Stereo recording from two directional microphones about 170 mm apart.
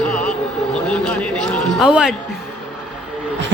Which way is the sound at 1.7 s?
5° right (ahead or behind).